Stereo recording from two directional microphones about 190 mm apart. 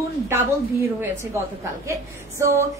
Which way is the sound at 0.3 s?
10° right (ahead or behind).